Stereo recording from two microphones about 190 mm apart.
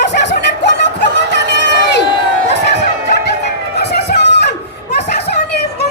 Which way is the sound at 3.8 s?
60° left (ahead or behind).